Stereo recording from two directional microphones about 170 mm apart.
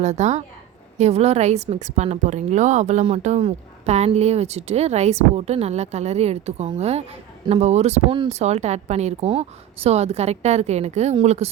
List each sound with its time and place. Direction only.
0.0 s a woman's voice: 40° right (ahead or behind)